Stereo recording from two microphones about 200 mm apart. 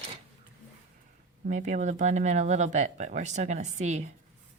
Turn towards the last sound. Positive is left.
turn(degrees=-35)  # may be behind; listen again after turning